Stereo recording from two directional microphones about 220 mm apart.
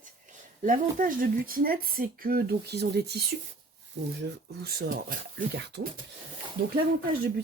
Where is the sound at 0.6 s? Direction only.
40° right (ahead or behind).